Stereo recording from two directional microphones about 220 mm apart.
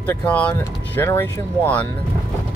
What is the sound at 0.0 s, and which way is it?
Speech, 10° left (ahead or behind).